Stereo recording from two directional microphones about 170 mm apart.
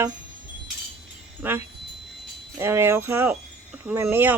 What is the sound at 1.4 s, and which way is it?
Speech, 10° right (ahead or behind).